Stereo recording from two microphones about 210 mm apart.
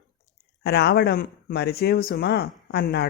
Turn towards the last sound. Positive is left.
turn(degrees=50)  # may be behind; listen again after turning